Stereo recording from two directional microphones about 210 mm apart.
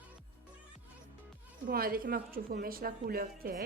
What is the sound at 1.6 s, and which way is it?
A woman's voice, 45° right (ahead or behind).